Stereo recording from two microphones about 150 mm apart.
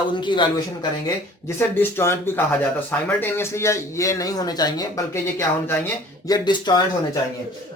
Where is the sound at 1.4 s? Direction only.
15° left (ahead or behind).